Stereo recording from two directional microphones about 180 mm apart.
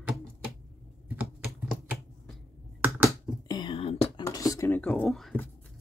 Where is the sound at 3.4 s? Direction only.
25° left (ahead or behind).